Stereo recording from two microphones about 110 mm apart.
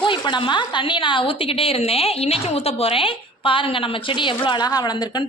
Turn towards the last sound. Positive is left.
turn(degrees=40)  # may be behind; listen again after turning